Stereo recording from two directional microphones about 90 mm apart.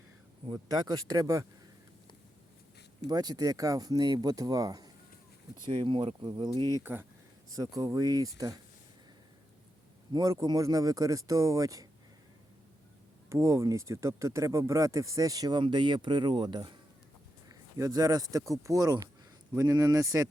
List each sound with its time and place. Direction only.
0.5 s speech: 45° right (ahead or behind)
3.1 s speech: 45° right (ahead or behind)
5.6 s speech: 65° right (ahead or behind); by 8.5 s 45° right (ahead or behind)
10.1 s a man's voice: 45° right (ahead or behind)
13.3 s speech: 35° right (ahead or behind)
15.6 s speech: 60° right (ahead or behind)
17.5 s speech: 40° right (ahead or behind)